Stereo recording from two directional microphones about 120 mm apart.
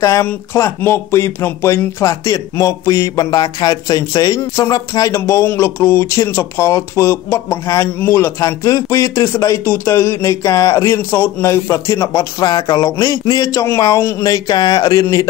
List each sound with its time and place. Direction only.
0.0 s speech: 25° left (ahead or behind)